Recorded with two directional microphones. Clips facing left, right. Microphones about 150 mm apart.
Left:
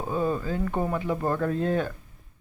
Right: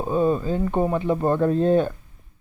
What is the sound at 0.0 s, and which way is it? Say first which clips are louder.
Speech: right 6 dB; 25° right (ahead or behind).